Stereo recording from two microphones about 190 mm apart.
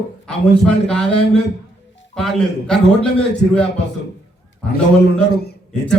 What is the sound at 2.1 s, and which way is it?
Speech, centre (ahead or behind).